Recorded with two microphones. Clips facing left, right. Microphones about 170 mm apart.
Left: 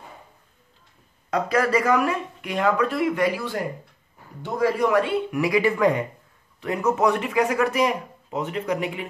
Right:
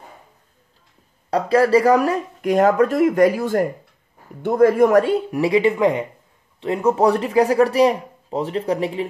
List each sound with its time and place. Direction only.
1.3 s speech: 30° right (ahead or behind)